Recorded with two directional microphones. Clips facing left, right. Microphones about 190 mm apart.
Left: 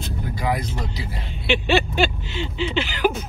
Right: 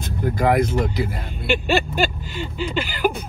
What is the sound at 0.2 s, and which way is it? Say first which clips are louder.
Speech: right 8 dB; 50° right (ahead or behind).